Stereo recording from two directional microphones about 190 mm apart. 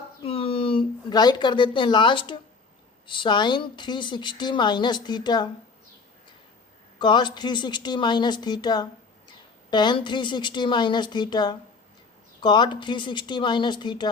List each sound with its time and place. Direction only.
0.2 s a sound: 30° left (ahead or behind)
3.1 s a woman's voice: 25° left (ahead or behind)
7.0 s a woman's voice: 25° left (ahead or behind)